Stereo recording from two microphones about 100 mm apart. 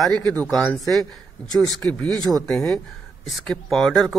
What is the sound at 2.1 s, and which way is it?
Speech, 40° right (ahead or behind).